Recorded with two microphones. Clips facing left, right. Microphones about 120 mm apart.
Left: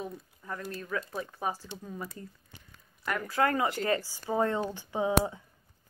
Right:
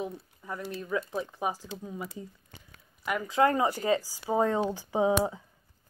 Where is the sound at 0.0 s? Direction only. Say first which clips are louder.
Right 3 dB; 15° right (ahead or behind).